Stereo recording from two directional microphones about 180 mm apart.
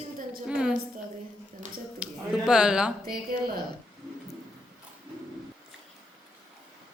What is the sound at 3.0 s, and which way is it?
Speech, 55° right (ahead or behind).